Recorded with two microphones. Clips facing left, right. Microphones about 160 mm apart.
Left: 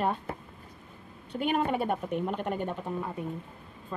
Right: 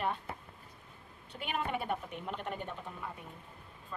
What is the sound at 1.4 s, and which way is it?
A woman's voice, 40° left (ahead or behind).